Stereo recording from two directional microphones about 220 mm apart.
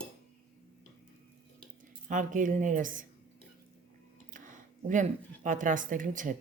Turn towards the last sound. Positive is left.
turn(degrees=-35)  # may be behind; listen again after turning